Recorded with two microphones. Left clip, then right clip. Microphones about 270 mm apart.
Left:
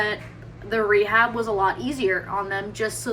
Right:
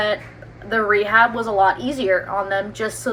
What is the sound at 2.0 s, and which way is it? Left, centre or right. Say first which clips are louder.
A woman's voice: right 4 dB; centre.